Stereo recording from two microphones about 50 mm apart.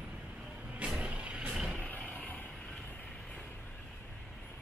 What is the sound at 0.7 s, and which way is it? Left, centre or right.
Vehicle, right.